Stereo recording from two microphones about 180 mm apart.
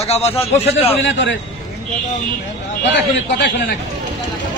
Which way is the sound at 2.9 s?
80° left.